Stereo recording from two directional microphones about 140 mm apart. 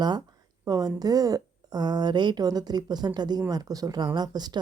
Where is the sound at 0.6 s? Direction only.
25° right (ahead or behind).